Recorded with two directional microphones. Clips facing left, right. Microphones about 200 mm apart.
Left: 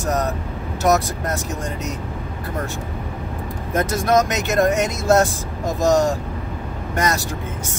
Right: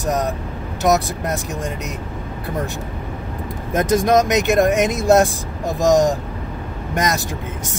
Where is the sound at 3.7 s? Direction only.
15° right (ahead or behind).